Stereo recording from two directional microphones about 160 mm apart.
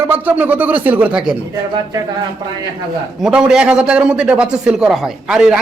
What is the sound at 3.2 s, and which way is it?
A man's voice, 5° right (ahead or behind).